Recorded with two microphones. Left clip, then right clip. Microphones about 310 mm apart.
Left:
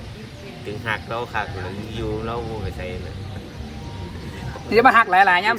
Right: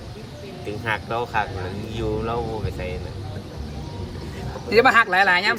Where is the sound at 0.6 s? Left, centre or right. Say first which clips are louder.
Even; centre.